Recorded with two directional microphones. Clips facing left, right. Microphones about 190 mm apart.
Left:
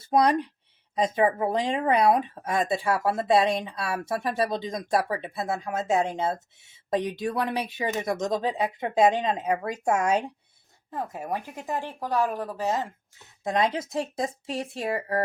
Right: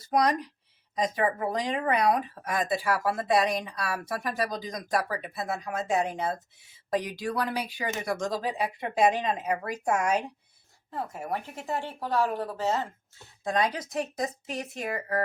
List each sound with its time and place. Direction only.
0.0 s speech: 30° left (ahead or behind)
10.9 s speech: 15° left (ahead or behind)